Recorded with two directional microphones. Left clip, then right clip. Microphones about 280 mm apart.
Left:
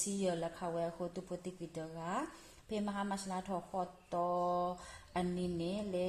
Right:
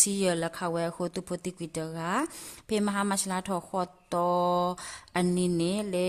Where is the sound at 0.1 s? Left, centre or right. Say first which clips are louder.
Right 9 dB; right.